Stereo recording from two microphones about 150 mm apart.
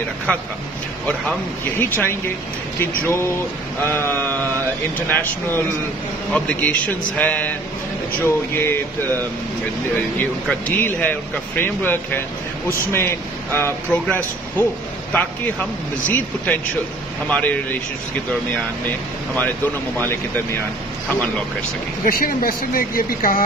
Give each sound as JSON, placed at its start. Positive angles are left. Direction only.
{"t": 0.3, "sound": "speech", "side_deg": 10}
{"t": 8.5, "sound": "speech", "side_deg": 15}
{"t": 10.7, "sound": "speech", "side_deg": 15}
{"t": 19.3, "sound": "speech", "side_deg": 10}
{"t": 22.0, "sound": "speech", "side_deg": 75}